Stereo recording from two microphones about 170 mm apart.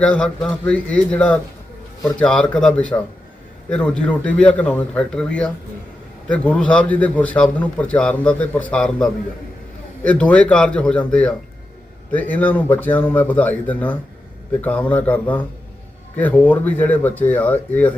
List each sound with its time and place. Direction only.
0.0 s a man's voice: 5° left (ahead or behind)